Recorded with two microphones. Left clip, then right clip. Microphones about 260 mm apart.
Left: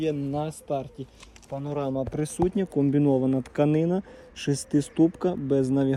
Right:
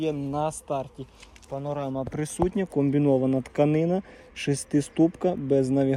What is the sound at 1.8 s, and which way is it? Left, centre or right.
Speech, right.